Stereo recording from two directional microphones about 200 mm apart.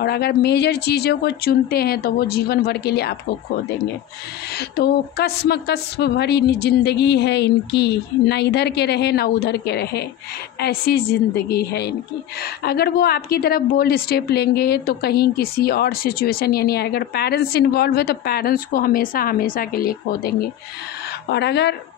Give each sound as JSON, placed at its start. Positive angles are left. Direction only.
{"t": 0.0, "sound": "a woman's voice", "side_deg": 55}
{"t": 4.5, "sound": "a woman's voice", "side_deg": 55}